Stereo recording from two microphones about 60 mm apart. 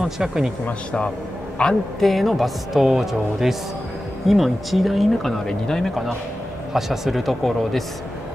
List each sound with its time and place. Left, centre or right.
0.0 s speech: centre
0.7 s a man's voice: centre
2.0 s speech: centre
6.7 s speech: centre